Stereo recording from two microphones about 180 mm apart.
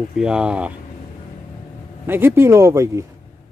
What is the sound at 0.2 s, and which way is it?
Speech, 5° right (ahead or behind).